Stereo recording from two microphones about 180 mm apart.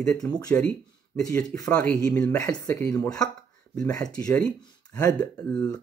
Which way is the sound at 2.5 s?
5° left (ahead or behind).